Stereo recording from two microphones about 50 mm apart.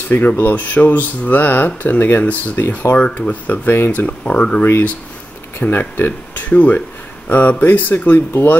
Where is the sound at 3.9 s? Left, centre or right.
Left.